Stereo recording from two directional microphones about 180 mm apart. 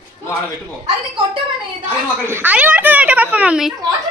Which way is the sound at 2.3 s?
10° right (ahead or behind).